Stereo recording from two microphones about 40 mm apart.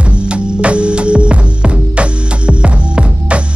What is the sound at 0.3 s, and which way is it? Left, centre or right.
Music, right.